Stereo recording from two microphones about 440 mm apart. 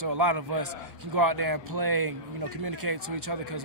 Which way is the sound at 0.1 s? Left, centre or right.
Right.